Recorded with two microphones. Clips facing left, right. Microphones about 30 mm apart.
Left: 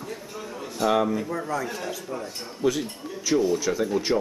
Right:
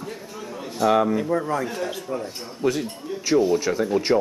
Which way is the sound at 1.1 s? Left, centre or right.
Right.